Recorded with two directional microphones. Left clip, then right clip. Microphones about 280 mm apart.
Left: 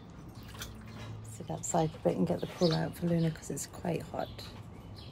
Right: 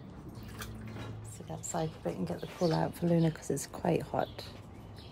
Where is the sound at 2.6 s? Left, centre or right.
Centre.